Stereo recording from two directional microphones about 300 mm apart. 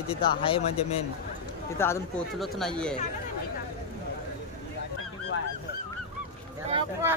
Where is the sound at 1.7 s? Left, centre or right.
Centre.